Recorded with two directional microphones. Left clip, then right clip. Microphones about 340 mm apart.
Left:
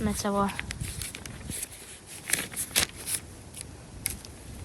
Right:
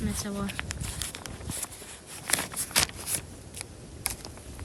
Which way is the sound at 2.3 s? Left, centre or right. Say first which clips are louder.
Right 2 dB; centre.